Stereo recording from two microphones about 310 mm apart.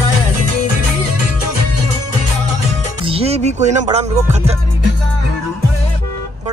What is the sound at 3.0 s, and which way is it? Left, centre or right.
Speech, centre.